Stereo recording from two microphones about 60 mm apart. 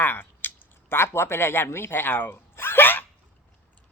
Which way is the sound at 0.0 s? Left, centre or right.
Left.